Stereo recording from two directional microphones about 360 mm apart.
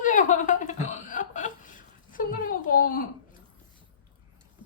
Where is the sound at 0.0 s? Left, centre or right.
Left.